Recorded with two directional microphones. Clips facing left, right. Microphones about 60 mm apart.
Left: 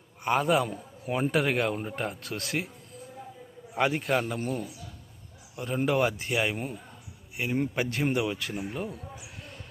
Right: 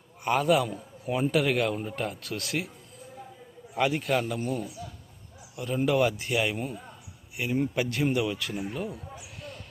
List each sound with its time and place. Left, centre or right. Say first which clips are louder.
0.3 s a man's voice: right 1 dB; left
3.8 s a man's voice: even; left